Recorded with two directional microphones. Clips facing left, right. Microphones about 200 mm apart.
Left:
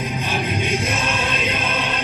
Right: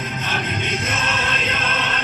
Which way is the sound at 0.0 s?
10° left (ahead or behind).